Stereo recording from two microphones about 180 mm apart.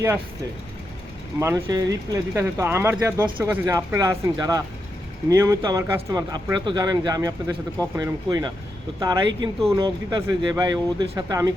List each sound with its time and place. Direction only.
1.4 s speech: 15° right (ahead or behind)